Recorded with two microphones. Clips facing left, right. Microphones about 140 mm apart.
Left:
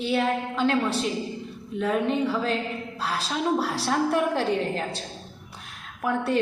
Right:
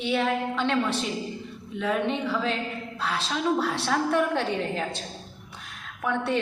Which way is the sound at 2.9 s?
35° left (ahead or behind).